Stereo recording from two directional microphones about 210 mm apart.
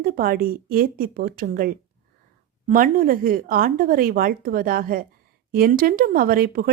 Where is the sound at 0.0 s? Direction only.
45° right (ahead or behind).